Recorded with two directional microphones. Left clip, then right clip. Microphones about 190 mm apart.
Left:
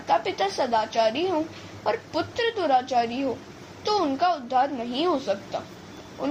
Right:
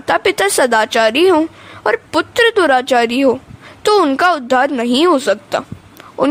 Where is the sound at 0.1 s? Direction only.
55° right (ahead or behind).